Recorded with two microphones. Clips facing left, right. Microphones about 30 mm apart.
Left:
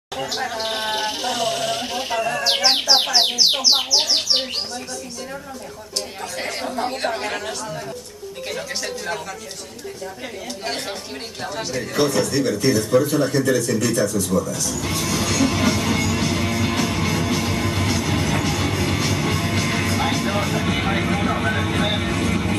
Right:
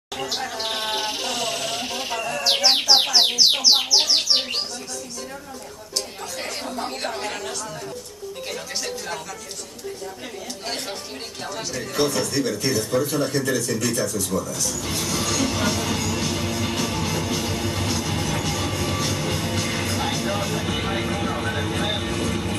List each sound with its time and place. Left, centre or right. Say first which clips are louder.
0.2 s speech: left 3 dB; centre
6.4 s speech: left 5 dB; centre
8.8 s speech: left 3 dB; centre
11.5 s speech: left 3 dB; centre
15.0 s music: left 4 dB; centre